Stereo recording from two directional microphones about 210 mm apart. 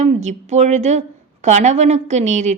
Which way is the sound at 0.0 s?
35° right (ahead or behind).